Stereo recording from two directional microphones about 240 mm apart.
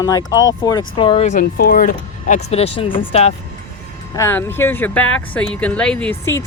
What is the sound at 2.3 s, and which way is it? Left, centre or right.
Speech, left.